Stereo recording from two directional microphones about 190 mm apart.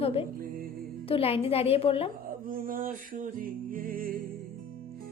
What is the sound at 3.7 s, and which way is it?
Music, 50° right (ahead or behind).